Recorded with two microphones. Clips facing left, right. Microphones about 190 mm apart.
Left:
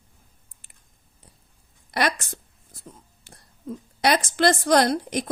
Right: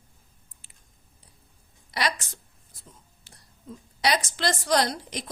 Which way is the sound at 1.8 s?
55° left (ahead or behind).